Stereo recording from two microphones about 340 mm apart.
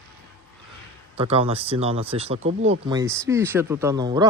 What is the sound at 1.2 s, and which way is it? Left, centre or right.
A man's voice, centre.